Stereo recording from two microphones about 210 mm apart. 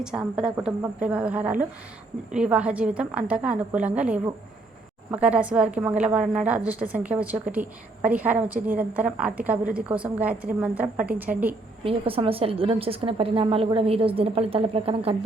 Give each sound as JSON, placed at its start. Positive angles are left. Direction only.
{"t": 0.0, "sound": "a woman's voice", "side_deg": -5}
{"t": 11.8, "sound": "a woman's voice", "side_deg": -25}